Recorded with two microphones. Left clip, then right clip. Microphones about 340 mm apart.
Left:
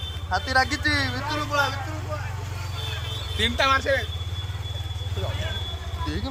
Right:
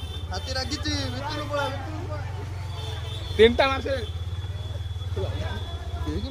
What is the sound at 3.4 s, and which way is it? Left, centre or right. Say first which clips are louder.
Speech: right 3 dB; centre.